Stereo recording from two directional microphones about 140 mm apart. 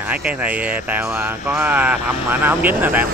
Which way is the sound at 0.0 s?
10° right (ahead or behind).